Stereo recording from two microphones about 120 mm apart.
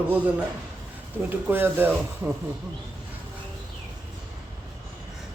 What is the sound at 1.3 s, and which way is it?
Speech, 15° right (ahead or behind).